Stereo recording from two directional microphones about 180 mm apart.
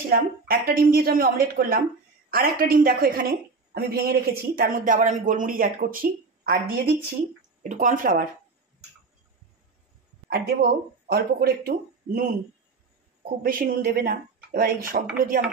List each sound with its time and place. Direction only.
0.1 s a woman's voice: 55° right (ahead or behind)
7.6 s a woman's voice: 45° right (ahead or behind)
11.1 s a woman's voice: 60° right (ahead or behind)
13.4 s a woman's voice: 50° right (ahead or behind)